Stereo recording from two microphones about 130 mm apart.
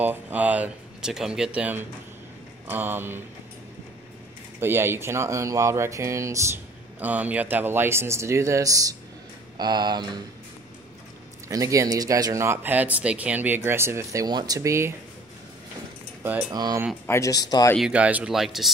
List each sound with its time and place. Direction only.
0.0 s speech: 10° right (ahead or behind)
4.6 s speech: 15° right (ahead or behind)
7.0 s speech: 10° right (ahead or behind); by 10.0 s 35° right (ahead or behind)
11.4 s speech: 25° right (ahead or behind)
14.2 s speech: 30° right (ahead or behind)
16.5 s speech: 30° right (ahead or behind)
17.0 s speech: 20° left (ahead or behind)
17.7 s speech: 5° right (ahead or behind)